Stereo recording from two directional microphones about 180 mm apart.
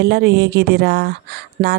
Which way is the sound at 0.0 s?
65° right (ahead or behind).